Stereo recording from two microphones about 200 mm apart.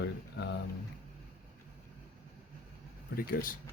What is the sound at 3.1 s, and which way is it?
Speech, 45° left (ahead or behind).